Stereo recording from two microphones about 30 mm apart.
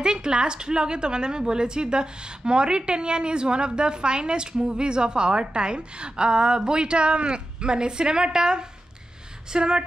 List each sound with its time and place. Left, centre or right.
0.0 s a woman's voice: right